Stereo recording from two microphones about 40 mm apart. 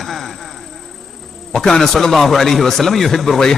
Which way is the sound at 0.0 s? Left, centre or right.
Centre.